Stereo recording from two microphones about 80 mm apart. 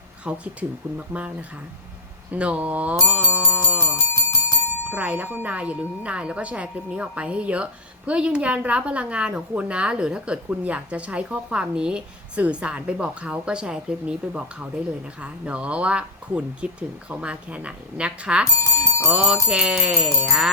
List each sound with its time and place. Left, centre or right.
0.3 s speech: centre
3.3 s music: centre
3.8 s bicycle bell: left
4.9 s speech: centre
18.6 s speech: left
19.1 s speech: centre